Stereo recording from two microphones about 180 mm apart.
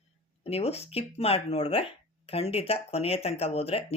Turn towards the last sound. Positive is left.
turn(degrees=35)  # may be behind; listen again after turning